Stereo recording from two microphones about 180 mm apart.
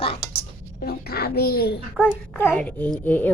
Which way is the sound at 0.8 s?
60° left (ahead or behind).